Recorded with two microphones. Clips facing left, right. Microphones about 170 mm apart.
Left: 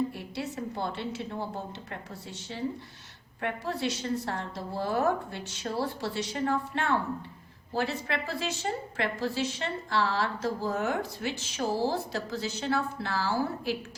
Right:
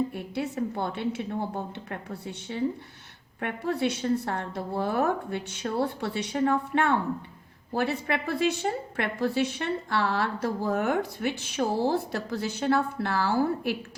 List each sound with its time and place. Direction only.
0.1 s a woman's voice: 55° right (ahead or behind)